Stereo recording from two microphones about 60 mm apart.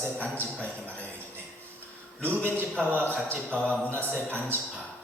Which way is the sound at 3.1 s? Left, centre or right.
Right.